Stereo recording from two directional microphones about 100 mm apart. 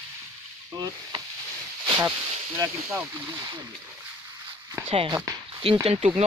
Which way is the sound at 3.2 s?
40° right (ahead or behind).